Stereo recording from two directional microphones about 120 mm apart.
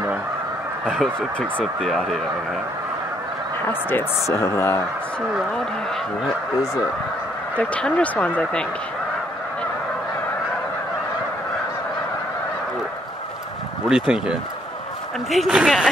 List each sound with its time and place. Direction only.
0.8 s a woman's voice: 5° left (ahead or behind)
3.9 s speech: 25° left (ahead or behind)
7.5 s speech: 10° left (ahead or behind)
13.8 s a woman's voice: 5° right (ahead or behind)